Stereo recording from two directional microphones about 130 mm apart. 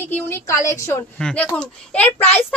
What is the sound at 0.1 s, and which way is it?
A woman's voice, 15° left (ahead or behind).